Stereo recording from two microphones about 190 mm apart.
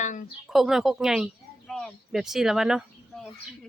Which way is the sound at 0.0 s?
40° left (ahead or behind).